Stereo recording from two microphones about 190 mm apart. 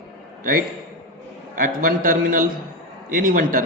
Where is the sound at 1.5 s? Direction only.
50° right (ahead or behind).